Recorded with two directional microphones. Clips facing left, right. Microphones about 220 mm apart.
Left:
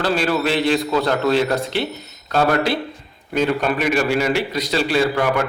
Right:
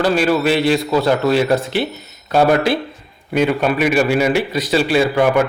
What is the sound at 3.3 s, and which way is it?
A man's voice, 10° right (ahead or behind).